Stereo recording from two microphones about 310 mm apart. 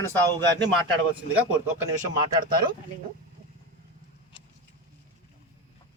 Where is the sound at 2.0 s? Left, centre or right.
Right.